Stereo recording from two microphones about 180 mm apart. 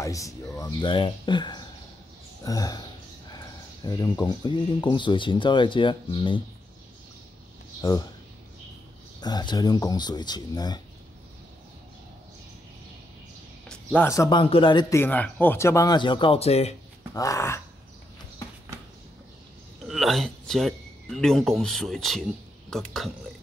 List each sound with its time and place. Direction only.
0.0 s speech: 20° left (ahead or behind)
7.8 s speech: 20° left (ahead or behind)
9.2 s speech: 25° left (ahead or behind)
13.9 s speech: 15° left (ahead or behind)
15.0 s speech: 10° left (ahead or behind); by 16.7 s 35° left (ahead or behind)
17.1 s speech: 20° left (ahead or behind)
19.8 s speech: centre (ahead or behind)